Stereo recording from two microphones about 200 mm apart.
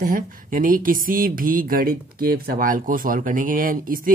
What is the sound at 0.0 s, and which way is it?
Speech, 45° right (ahead or behind).